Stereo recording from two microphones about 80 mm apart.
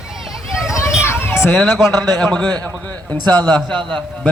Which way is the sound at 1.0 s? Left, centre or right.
Left.